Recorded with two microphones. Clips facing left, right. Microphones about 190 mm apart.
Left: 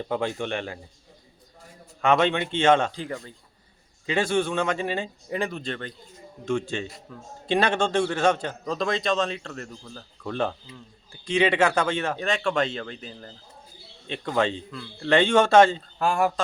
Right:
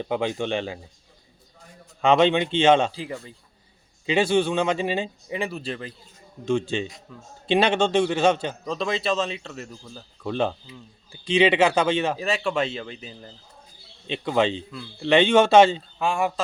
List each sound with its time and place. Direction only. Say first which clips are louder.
0.1 s speech: right 2 dB; 20° right (ahead or behind)
2.0 s speech: right 3 dB; 25° right (ahead or behind)
2.9 s a man's voice: even; 5° right (ahead or behind)
4.0 s speech: right 3 dB; 20° right (ahead or behind)
5.3 s a man's voice: left 2 dB; 5° right (ahead or behind)
6.4 s speech: right 3 dB; 25° right (ahead or behind)
6.8 s a man's voice: right 1 dB; 5° left (ahead or behind)
7.5 s speech: right 3 dB; 20° right (ahead or behind)
8.6 s a man's voice: left 1 dB; centre (ahead or behind)
10.2 s speech: right 3 dB; 20° right (ahead or behind)
12.1 s a man's voice: even; 5° right (ahead or behind)
14.1 s speech: right 2 dB; 20° right (ahead or behind)
16.0 s a man's voice: left 2 dB; centre (ahead or behind)